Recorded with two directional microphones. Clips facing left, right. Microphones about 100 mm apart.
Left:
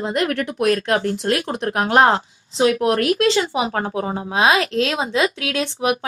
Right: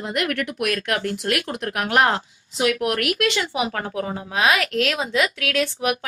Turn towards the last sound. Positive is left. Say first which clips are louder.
# left 2 dB
turn(degrees=25)  # may be behind; listen again after turning